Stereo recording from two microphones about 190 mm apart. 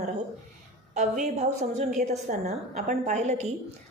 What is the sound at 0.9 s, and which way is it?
A woman's voice, 40° right (ahead or behind).